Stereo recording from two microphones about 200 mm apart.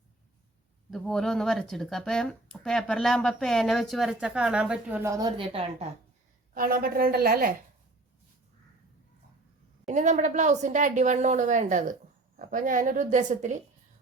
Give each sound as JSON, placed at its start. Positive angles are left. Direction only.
{"t": 0.9, "sound": "speech", "side_deg": 5}
{"t": 6.5, "sound": "a woman's voice", "side_deg": -45}
{"t": 9.8, "sound": "a woman's voice", "side_deg": -40}